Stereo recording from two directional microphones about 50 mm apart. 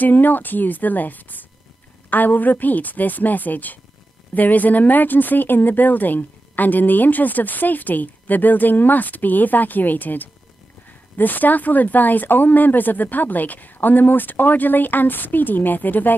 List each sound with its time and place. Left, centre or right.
0.0 s speech: left